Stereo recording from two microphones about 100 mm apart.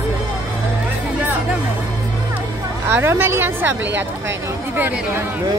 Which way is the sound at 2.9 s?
20° right (ahead or behind).